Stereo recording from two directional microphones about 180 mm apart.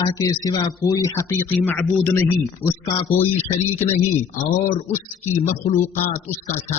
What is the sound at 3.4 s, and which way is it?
Speech, 35° left (ahead or behind).